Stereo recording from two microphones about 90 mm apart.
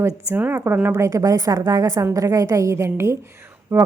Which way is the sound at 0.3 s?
25° right (ahead or behind).